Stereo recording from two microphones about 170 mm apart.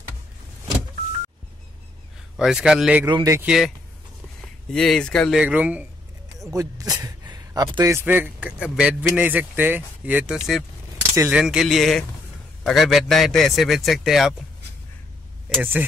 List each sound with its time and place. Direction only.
2.3 s a man's voice: 5° right (ahead or behind)
3.1 s speech: 25° right (ahead or behind)
3.3 s a man's voice: 5° right (ahead or behind)
5.4 s a man's voice: 10° right (ahead or behind)
6.5 s a man's voice: 20° right (ahead or behind); by 14.3 s centre (ahead or behind)
15.6 s a man's voice: 10° right (ahead or behind)